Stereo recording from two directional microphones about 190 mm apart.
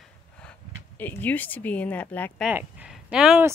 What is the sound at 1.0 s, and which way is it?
A woman's voice, 10° left (ahead or behind).